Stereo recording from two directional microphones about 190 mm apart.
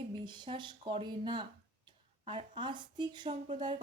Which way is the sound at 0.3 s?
25° right (ahead or behind).